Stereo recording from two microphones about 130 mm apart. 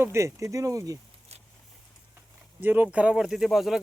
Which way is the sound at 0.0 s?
20° right (ahead or behind).